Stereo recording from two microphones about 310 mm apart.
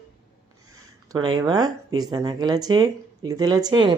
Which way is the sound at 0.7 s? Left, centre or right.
Centre.